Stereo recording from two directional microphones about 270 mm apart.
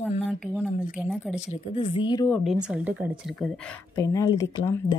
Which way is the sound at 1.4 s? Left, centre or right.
Left.